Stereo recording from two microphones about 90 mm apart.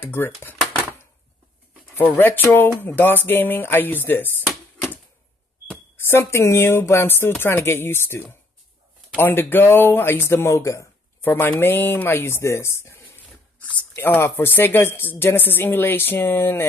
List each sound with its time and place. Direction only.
0.0 s speech: 25° left (ahead or behind)
2.0 s speech: 20° left (ahead or behind)
5.9 s speech: 25° left (ahead or behind)
11.2 s speech: 25° left (ahead or behind)